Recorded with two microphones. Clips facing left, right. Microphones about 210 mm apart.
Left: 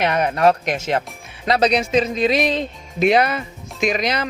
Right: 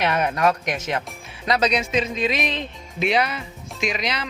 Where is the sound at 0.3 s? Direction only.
30° left (ahead or behind).